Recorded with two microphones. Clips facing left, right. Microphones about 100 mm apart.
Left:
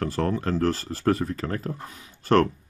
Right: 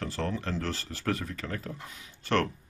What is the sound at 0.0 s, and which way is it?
Speech, 45° left (ahead or behind).